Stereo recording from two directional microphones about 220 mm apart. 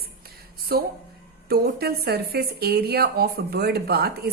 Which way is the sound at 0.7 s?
45° right (ahead or behind).